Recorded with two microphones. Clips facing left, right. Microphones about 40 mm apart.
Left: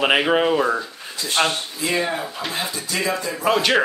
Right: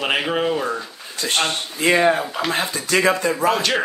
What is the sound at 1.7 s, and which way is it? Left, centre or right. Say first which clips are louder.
Speech: right 10 dB; right.